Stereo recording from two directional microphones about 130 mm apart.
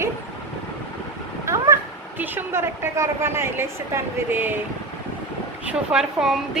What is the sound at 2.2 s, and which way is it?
A woman's voice, 15° right (ahead or behind).